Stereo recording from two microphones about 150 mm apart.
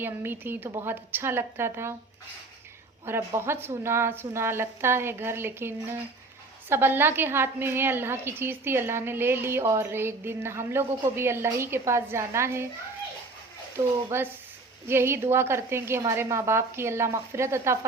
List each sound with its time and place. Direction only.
0.0 s a woman's voice: 15° right (ahead or behind)
3.1 s a woman's voice: 15° right (ahead or behind)
13.7 s a woman's voice: 15° right (ahead or behind)